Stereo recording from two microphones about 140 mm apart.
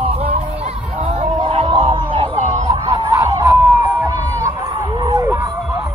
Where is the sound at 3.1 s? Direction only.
35° right (ahead or behind).